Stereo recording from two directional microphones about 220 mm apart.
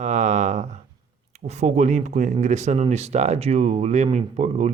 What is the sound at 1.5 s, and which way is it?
Speech, 30° right (ahead or behind).